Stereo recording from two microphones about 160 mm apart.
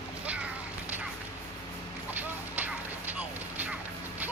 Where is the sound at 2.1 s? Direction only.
10° right (ahead or behind).